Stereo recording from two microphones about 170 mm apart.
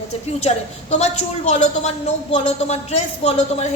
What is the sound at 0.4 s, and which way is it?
A woman's voice, 40° left (ahead or behind).